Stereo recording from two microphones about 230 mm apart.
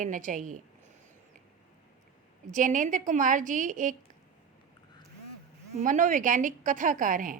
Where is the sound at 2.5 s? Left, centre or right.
Right.